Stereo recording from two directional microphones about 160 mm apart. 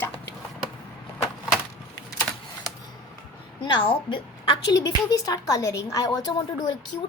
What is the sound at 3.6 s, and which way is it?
A woman's voice, 30° left (ahead or behind).